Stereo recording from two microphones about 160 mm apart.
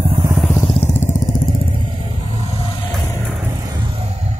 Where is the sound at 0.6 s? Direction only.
40° left (ahead or behind).